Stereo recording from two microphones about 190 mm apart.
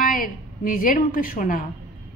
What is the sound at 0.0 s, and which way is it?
A woman's voice, 45° left (ahead or behind).